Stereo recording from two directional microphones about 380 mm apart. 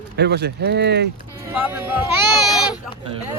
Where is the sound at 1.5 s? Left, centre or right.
Centre.